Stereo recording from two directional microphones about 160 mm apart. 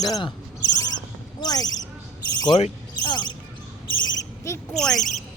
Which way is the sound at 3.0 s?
25° left (ahead or behind).